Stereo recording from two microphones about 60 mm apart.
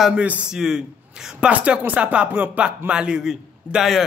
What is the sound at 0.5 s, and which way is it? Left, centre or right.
Speech, centre.